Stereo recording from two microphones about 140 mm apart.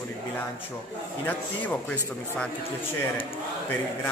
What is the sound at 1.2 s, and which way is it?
A man's voice, 10° left (ahead or behind).